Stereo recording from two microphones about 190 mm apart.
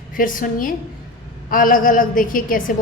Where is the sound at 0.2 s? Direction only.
45° left (ahead or behind).